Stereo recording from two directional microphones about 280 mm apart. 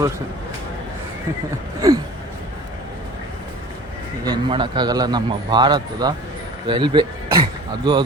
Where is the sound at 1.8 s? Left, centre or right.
Centre.